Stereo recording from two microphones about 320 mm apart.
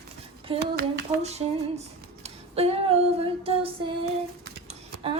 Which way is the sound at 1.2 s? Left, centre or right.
Centre.